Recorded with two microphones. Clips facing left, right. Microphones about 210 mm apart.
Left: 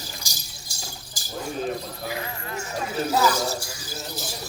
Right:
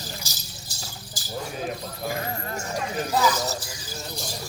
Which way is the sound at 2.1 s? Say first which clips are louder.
Right 3 dB; 45° right (ahead or behind).